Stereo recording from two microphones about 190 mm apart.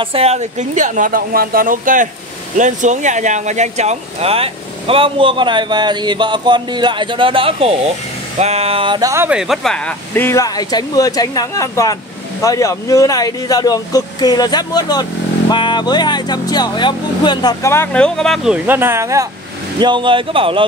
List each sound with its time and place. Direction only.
0.0 s speech: 30° right (ahead or behind)
9.1 s speech: 10° right (ahead or behind); by 20.6 s 25° right (ahead or behind)